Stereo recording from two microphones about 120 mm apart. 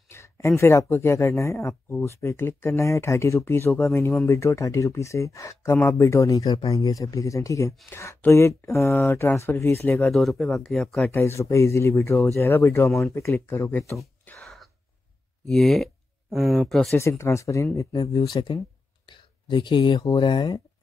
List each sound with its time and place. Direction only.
0.1 s speech: 25° left (ahead or behind)
10.1 s speech: centre (ahead or behind)
11.1 s speech: 20° left (ahead or behind)
14.2 s wail: 5° left (ahead or behind)
15.4 s speech: centre (ahead or behind)
17.2 s speech: 25° left (ahead or behind)